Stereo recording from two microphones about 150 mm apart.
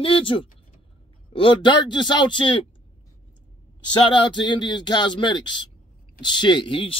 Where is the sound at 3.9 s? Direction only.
30° left (ahead or behind).